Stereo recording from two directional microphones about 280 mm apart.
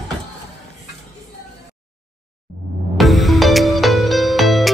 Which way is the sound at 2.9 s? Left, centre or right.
Centre.